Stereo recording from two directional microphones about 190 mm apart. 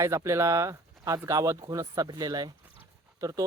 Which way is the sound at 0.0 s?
15° right (ahead or behind).